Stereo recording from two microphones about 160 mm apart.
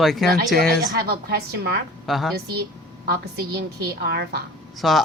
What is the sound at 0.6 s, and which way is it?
A woman's voice, 90° right.